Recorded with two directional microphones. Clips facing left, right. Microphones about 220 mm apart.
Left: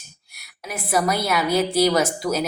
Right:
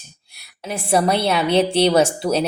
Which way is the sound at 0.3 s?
30° right (ahead or behind).